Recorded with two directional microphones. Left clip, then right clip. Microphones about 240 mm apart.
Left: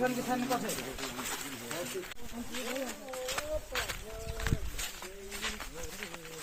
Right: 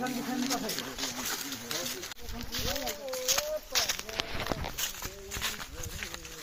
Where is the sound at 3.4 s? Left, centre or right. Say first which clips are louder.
Right 4 dB; right.